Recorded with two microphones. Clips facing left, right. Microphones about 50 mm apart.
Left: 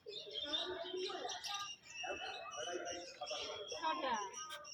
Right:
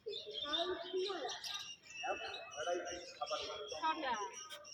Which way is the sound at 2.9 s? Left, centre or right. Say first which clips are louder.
Right 3 dB; left.